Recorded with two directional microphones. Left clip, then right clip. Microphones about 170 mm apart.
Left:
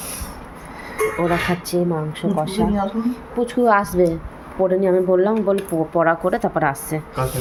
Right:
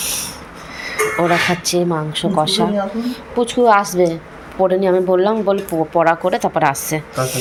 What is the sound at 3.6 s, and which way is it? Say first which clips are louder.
Speech: right 3 dB; 15° left (ahead or behind).